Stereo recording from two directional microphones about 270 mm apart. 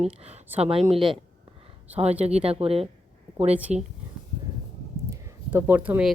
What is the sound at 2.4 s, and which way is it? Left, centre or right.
Speech, right.